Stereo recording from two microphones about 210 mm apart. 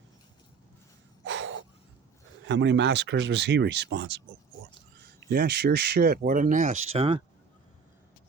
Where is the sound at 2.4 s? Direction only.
60° right (ahead or behind); by 7.2 s 25° right (ahead or behind).